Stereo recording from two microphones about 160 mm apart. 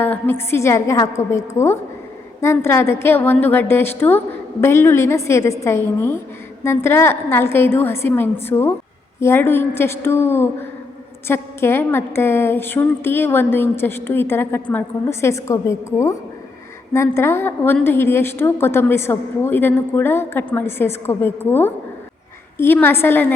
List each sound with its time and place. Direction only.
0.0 s a woman's voice: 15° left (ahead or behind)